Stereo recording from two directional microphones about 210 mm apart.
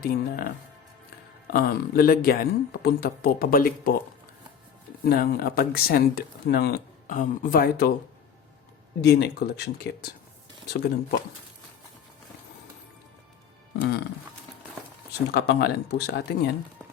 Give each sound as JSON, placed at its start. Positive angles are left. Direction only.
{"t": 0.0, "sound": "speech", "side_deg": 45}
{"t": 1.5, "sound": "speech", "side_deg": 45}
{"t": 5.0, "sound": "speech", "side_deg": 45}
{"t": 9.0, "sound": "speech", "side_deg": 55}
{"t": 15.3, "sound": "speech", "side_deg": 50}